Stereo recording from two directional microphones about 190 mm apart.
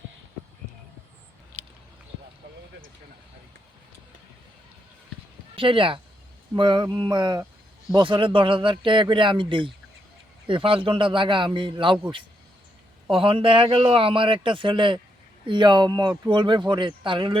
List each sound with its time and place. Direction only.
1.5 s a sound: 40° right (ahead or behind)
5.5 s a man's voice: 25° right (ahead or behind)
13.1 s a man's voice: 30° right (ahead or behind)